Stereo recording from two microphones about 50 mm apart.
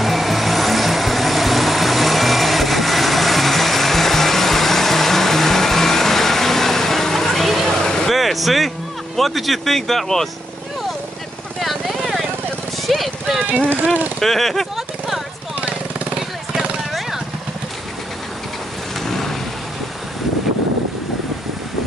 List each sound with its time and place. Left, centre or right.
0.0 s vehicle: centre
8.1 s music: centre
11.6 s vehicle: centre
12.8 s clip-clop: centre
13.8 s speech: right
14.2 s a sound: centre
16.2 s vehicle: centre
19.0 s vehicle: centre